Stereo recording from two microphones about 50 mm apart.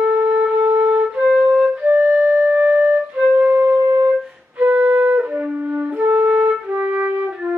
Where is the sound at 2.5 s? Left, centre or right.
Right.